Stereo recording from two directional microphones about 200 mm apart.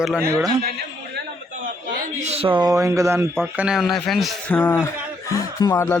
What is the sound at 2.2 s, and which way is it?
A man's voice, 30° right (ahead or behind).